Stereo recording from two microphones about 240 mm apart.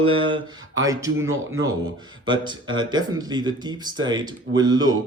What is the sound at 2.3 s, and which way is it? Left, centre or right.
Speech, centre.